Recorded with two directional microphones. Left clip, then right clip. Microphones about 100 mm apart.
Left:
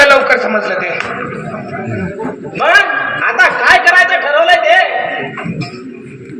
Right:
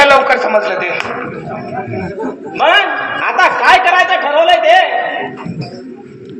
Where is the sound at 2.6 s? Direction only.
30° right (ahead or behind).